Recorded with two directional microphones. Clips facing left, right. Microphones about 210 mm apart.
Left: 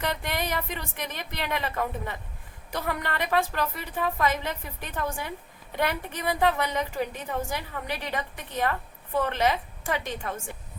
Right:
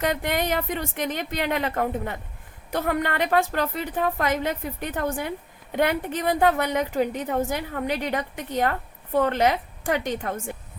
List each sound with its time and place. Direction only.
0.0 s a woman's voice: 50° right (ahead or behind)